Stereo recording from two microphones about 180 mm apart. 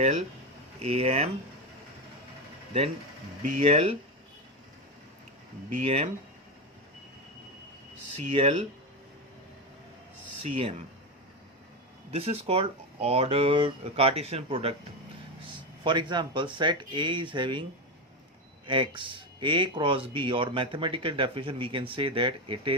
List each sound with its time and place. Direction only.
0.0 s speech: 40° right (ahead or behind)
3.4 s speech: 45° right (ahead or behind)
5.8 s speech: 30° right (ahead or behind)
8.1 s speech: 35° right (ahead or behind)
10.4 s speech: 35° right (ahead or behind)
12.1 s speech: 35° right (ahead or behind)
15.8 s speech: 25° right (ahead or behind)
18.6 s speech: 25° right (ahead or behind)